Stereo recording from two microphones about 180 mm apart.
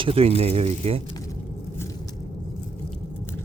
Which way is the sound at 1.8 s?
20° left (ahead or behind).